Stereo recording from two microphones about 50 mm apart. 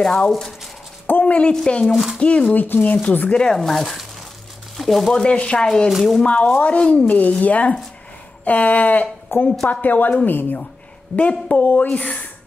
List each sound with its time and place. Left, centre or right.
0.0 s speech: centre
0.3 s speech: centre
1.2 s speech: left
1.9 s speech: centre
2.1 s speech: left
2.6 s a woman's voice: left
3.0 s speech: left
3.3 s speech: centre
5.2 s speech: left
5.9 s speech: centre
6.2 s a woman's voice: left
9.3 s a woman's voice: left
11.1 s speech: left